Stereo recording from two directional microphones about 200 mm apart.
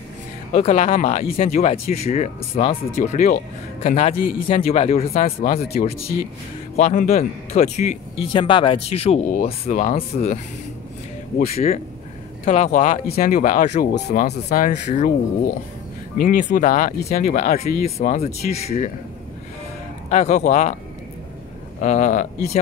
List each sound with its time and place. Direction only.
0.5 s speech: 35° left (ahead or behind)
6.8 s speech: 40° left (ahead or behind)
16.2 s speech: 45° left (ahead or behind)
20.1 s speech: 35° left (ahead or behind)
21.7 s speech: 35° left (ahead or behind)